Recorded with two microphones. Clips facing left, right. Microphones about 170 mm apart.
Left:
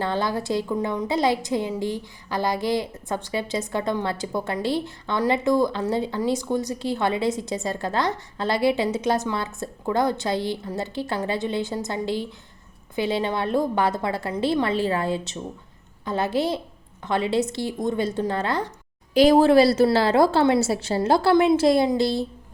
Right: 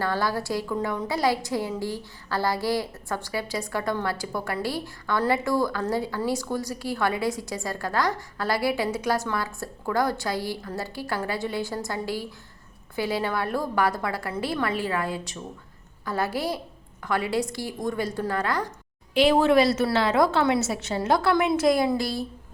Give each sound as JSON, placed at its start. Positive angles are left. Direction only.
{"t": 0.0, "sound": "a woman's voice", "side_deg": 20}
{"t": 19.1, "sound": "a woman's voice", "side_deg": 40}